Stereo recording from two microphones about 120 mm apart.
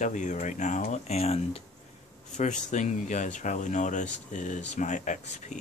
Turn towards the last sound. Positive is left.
turn(degrees=80)